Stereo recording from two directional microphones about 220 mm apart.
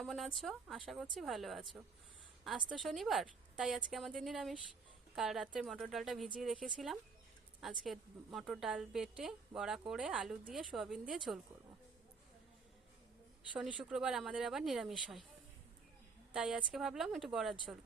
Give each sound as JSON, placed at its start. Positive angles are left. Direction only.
{"t": 0.0, "sound": "a woman's voice", "side_deg": 0}
{"t": 7.6, "sound": "a woman's voice", "side_deg": 0}
{"t": 13.6, "sound": "a woman's voice", "side_deg": -5}
{"t": 16.3, "sound": "a woman's voice", "side_deg": -5}